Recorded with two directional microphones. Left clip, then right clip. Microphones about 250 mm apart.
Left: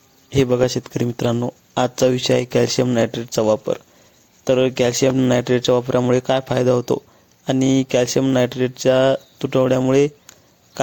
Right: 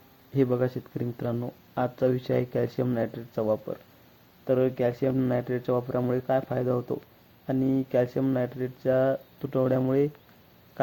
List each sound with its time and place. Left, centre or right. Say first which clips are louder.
0.3 s speech: left 9 dB; left